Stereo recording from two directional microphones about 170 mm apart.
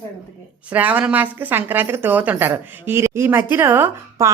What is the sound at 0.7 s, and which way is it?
A woman's voice, 10° right (ahead or behind).